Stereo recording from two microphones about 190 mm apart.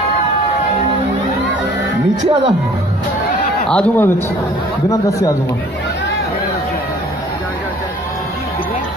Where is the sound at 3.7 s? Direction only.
5° left (ahead or behind).